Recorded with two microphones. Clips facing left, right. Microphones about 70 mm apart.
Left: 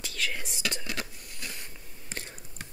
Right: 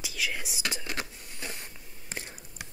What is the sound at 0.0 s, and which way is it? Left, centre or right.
Whispering, centre.